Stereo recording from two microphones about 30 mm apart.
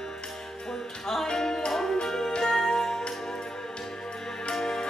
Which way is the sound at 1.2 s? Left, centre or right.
Left.